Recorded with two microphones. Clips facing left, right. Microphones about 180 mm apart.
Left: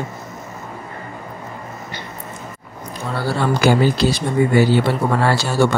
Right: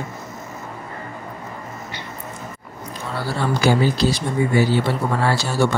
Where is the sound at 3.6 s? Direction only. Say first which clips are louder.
Left 2 dB; 60° left (ahead or behind).